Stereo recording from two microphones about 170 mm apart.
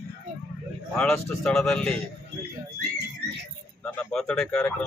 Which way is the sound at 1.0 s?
5° left (ahead or behind).